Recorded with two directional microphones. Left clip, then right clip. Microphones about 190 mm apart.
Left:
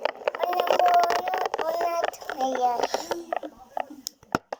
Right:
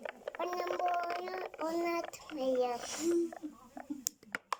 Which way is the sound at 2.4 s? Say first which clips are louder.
Left 8 dB; 45° right (ahead or behind).